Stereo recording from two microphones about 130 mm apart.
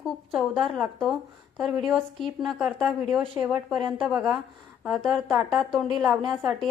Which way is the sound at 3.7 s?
40° right (ahead or behind).